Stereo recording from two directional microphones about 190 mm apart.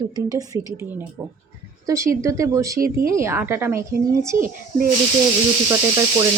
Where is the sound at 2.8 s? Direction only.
50° right (ahead or behind).